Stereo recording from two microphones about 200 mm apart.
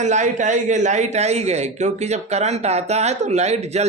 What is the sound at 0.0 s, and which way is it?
A man's voice, 35° right (ahead or behind).